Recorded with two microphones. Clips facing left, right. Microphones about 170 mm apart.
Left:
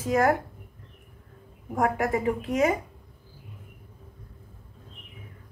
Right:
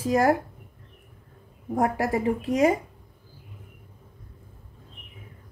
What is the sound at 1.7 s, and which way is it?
A woman's voice, 30° right (ahead or behind).